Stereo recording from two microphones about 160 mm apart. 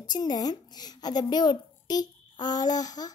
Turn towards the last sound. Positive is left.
turn(degrees=25)  # may be behind; listen again after turning